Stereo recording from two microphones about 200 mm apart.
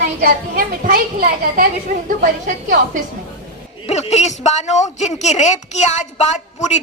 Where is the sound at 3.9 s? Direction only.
35° left (ahead or behind).